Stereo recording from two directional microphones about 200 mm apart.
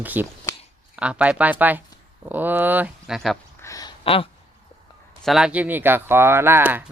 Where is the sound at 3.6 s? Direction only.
15° left (ahead or behind).